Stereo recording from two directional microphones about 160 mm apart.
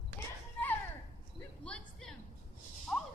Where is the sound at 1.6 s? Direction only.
5° left (ahead or behind).